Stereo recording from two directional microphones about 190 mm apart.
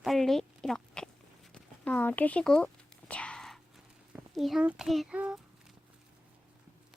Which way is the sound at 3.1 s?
5° left (ahead or behind).